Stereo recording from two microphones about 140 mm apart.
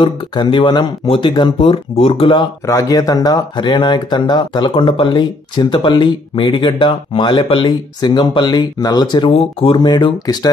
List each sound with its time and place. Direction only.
0.0 s speech: 35° left (ahead or behind)
2.6 s speech: 25° left (ahead or behind)